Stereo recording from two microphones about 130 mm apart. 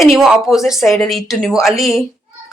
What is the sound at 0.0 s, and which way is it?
A woman's voice, centre (ahead or behind).